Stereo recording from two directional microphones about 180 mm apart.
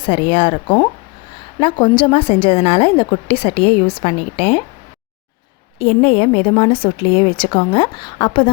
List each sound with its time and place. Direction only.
0.0 s a woman's voice: 30° left (ahead or behind)
5.8 s speech: 35° left (ahead or behind)